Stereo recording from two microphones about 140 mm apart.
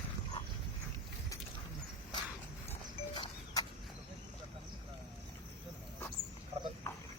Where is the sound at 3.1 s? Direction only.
30° left (ahead or behind).